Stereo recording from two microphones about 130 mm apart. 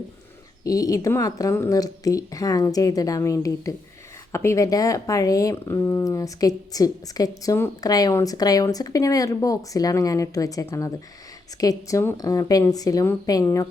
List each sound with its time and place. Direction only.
0.6 s a woman's voice: 25° left (ahead or behind)